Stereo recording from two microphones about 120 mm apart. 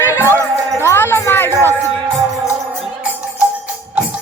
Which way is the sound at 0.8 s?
20° left (ahead or behind).